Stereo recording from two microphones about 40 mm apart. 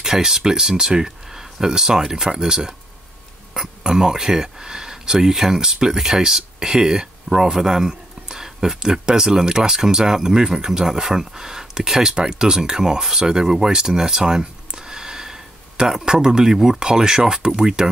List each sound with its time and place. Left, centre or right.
0.0 s speech: centre